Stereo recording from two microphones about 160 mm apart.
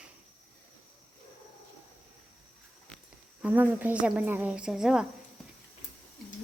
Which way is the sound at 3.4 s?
10° right (ahead or behind).